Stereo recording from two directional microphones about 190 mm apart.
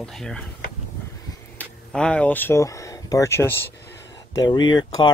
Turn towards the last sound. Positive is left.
turn(degrees=25)  # may be behind; listen again after turning